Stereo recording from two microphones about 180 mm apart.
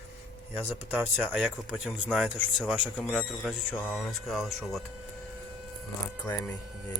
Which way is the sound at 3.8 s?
10° left (ahead or behind).